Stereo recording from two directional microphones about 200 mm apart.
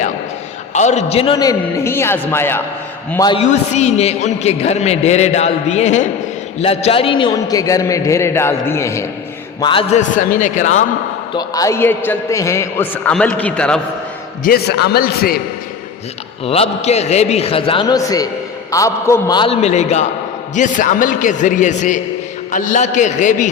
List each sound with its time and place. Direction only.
0.7 s a man's voice: 35° left (ahead or behind); by 3.3 s 20° left (ahead or behind)
3.3 s a man's voice: 35° left (ahead or behind)
9.9 s a man's voice: 40° left (ahead or behind)
11.3 s a man's voice: 15° left (ahead or behind)
14.4 s a man's voice: 50° left (ahead or behind)
16.5 s a man's voice: 30° left (ahead or behind)